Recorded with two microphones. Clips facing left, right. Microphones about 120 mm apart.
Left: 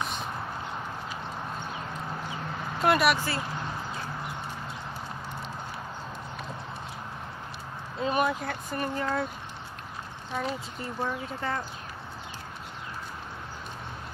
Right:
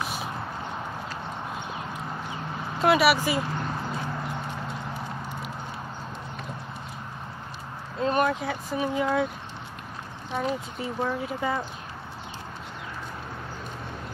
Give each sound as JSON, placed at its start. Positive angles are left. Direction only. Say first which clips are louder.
{"t": 2.8, "sound": "speech", "louder": "right 3 dB", "side_deg": 0}
{"t": 3.2, "sound": "speech", "louder": "right 5 dB", "side_deg": -15}
{"t": 8.0, "sound": "speech", "louder": "right 3 dB", "side_deg": 5}
{"t": 10.4, "sound": "speech", "louder": "right 6 dB", "side_deg": 0}